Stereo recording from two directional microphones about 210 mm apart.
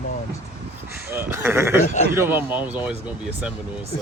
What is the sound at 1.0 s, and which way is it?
Speech, 10° right (ahead or behind).